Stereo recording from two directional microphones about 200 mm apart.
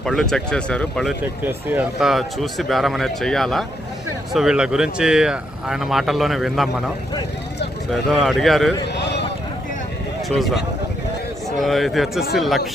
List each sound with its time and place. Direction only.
0.0 s speech: centre (ahead or behind)
1.5 s speech: 10° right (ahead or behind)
8.9 s a sound: 55° left (ahead or behind)
10.2 s speech: centre (ahead or behind)
11.6 s speech: centre (ahead or behind)